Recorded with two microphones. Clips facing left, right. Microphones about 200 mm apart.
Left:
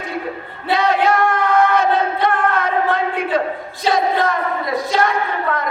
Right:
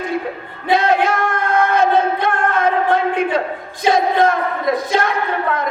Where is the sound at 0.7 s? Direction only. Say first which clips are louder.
Right 1 dB; 50° right (ahead or behind).